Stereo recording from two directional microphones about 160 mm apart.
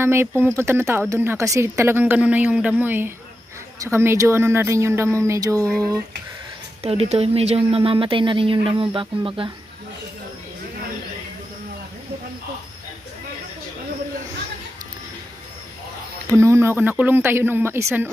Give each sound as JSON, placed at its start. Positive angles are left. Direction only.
{"t": 0.0, "sound": "speech", "side_deg": -15}
{"t": 6.8, "sound": "speech", "side_deg": -40}
{"t": 16.3, "sound": "speech", "side_deg": -15}